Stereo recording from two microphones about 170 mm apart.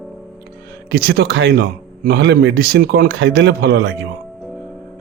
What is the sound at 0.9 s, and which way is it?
A man's voice, 65° right (ahead or behind).